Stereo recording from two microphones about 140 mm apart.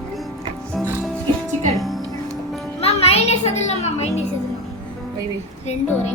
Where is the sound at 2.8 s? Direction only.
45° left (ahead or behind).